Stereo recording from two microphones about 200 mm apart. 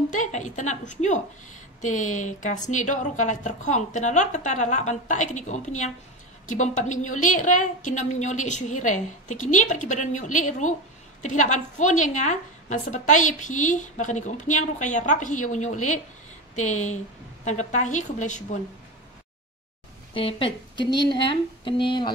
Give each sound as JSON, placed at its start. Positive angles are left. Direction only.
{"t": 0.1, "sound": "a woman's voice", "side_deg": 40}
{"t": 20.2, "sound": "speech", "side_deg": 25}